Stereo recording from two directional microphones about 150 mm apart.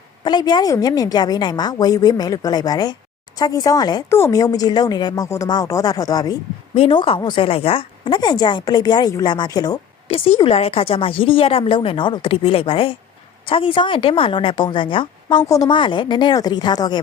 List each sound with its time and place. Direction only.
0.3 s a woman's voice: 30° left (ahead or behind)
6.7 s a woman's voice: 35° left (ahead or behind)
10.1 s a woman's voice: 40° left (ahead or behind)
15.4 s a woman's voice: 20° left (ahead or behind)
15.7 s a woman's voice: 35° left (ahead or behind)